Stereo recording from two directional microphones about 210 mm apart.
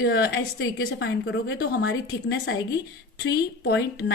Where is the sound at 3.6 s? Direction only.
50° left (ahead or behind).